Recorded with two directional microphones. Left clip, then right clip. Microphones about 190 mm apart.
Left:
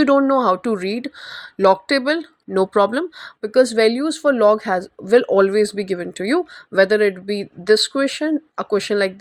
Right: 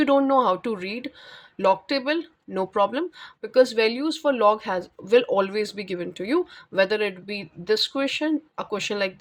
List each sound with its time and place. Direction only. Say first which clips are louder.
0.0 s speech: left 4 dB; 20° left (ahead or behind)